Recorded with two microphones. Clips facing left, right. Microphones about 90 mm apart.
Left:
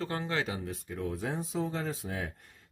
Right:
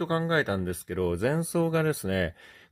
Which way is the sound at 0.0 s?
45° right (ahead or behind).